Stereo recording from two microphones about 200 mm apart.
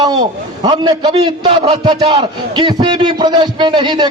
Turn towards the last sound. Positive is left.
turn(degrees=-20)  # may be behind; listen again after turning